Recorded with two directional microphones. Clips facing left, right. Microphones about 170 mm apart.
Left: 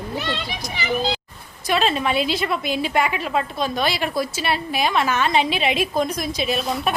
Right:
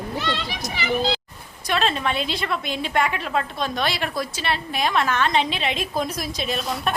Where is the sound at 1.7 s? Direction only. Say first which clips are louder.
Left 3 dB; 5° left (ahead or behind).